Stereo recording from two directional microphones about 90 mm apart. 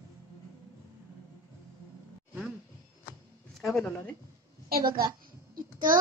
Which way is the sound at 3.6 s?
Centre (ahead or behind).